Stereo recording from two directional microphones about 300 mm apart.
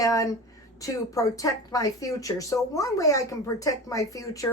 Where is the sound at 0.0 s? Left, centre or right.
Centre.